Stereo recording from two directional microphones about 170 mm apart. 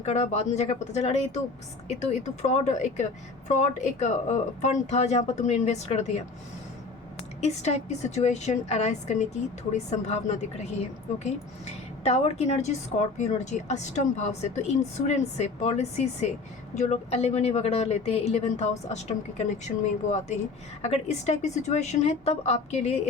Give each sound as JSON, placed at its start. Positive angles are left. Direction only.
{"t": 0.0, "sound": "a woman's voice", "side_deg": 40}
{"t": 7.4, "sound": "a woman's voice", "side_deg": 40}